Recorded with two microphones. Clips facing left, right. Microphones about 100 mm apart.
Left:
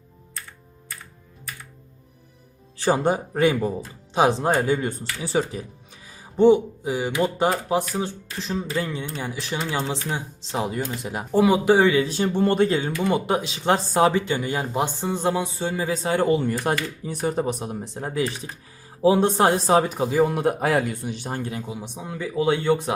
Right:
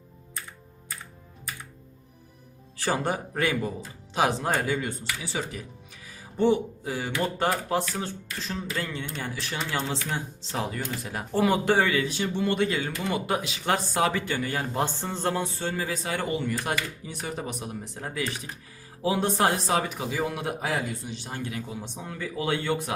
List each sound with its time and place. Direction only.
2.7 s speech: 25° left (ahead or behind)
6.1 s speech: 20° left (ahead or behind)
12.0 s speech: 40° left (ahead or behind)
21.7 s speech: 15° left (ahead or behind)